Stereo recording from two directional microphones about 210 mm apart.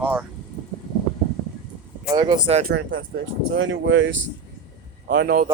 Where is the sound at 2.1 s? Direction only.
20° right (ahead or behind).